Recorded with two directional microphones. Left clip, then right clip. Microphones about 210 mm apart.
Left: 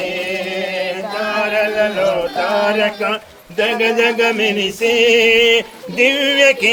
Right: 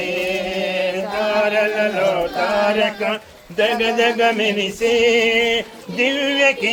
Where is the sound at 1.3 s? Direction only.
10° left (ahead or behind).